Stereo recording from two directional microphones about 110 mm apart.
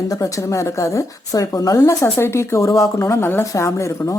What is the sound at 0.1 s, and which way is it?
A woman's voice, 30° left (ahead or behind).